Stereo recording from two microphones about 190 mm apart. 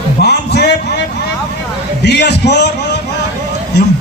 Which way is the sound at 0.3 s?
60° left (ahead or behind).